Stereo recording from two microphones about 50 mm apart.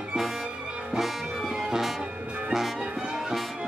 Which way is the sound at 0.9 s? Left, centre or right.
Centre.